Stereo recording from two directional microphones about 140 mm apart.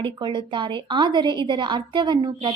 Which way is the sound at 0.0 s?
35° right (ahead or behind).